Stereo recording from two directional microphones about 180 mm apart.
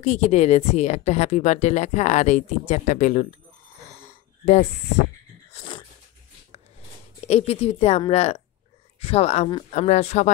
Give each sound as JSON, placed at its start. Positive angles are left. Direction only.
{"t": 0.0, "sound": "a woman's voice", "side_deg": 40}
{"t": 5.5, "sound": "a sound", "side_deg": 30}
{"t": 7.2, "sound": "a woman's voice", "side_deg": 35}